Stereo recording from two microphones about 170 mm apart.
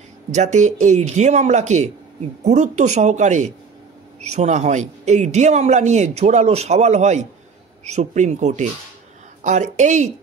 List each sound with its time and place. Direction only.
0.3 s a man's voice: 45° right (ahead or behind)